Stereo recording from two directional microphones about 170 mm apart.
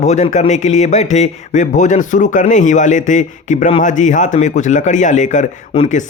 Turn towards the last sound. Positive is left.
turn(degrees=40)  # may be behind; listen again after turning